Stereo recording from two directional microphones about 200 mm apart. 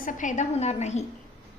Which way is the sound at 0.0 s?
40° left (ahead or behind).